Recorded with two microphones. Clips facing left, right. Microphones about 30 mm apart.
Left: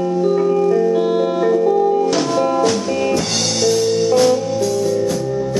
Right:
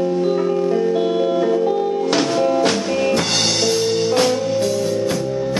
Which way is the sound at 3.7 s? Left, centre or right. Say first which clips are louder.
Left 3 dB; right.